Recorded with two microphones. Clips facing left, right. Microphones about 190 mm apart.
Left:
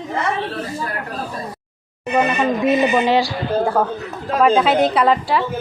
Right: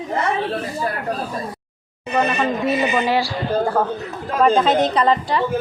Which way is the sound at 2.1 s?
15° left (ahead or behind).